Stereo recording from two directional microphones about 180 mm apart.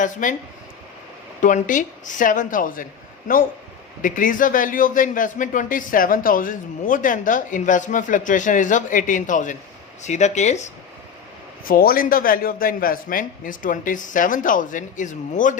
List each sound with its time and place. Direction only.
0.0 s a man's voice: 45° left (ahead or behind)
1.4 s a man's voice: 45° left (ahead or behind)
4.0 s a man's voice: 45° left (ahead or behind)
11.6 s a man's voice: 55° left (ahead or behind)